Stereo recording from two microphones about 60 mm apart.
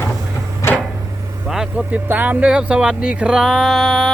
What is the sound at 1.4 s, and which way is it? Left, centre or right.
Vehicle, centre.